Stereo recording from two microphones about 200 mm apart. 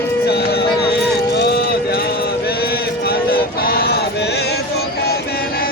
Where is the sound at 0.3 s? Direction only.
50° left (ahead or behind).